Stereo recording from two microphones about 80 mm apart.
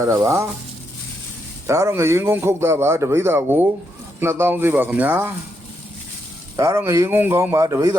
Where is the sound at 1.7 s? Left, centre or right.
Right.